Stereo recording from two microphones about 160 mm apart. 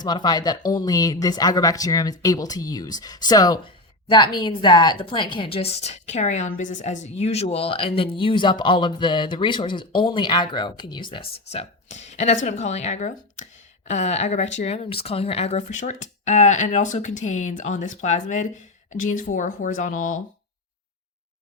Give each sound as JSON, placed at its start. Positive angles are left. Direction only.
{"t": 0.0, "sound": "a woman's voice", "side_deg": 25}
{"t": 11.5, "sound": "speech", "side_deg": 45}